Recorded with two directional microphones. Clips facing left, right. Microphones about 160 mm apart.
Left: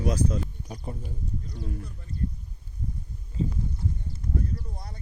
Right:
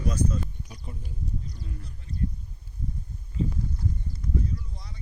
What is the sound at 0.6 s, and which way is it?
Speech, 45° left (ahead or behind).